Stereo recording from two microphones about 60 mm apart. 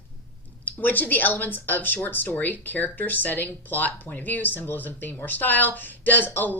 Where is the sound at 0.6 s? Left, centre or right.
Left.